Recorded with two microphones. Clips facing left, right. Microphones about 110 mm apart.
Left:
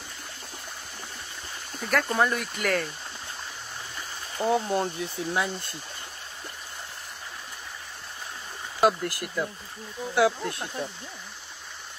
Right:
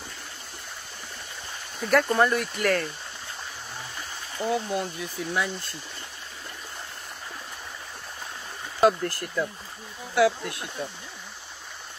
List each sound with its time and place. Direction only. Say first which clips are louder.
1.8 s speech: right 3 dB; centre (ahead or behind)
4.5 s speech: left 3 dB; 30° left (ahead or behind)
8.8 s speech: right 2 dB; 10° left (ahead or behind)
10.1 s speech: right 1 dB; 25° left (ahead or behind)